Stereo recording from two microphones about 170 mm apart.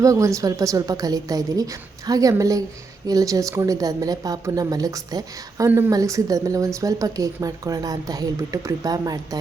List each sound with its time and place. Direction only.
0.0 s speech: 20° right (ahead or behind)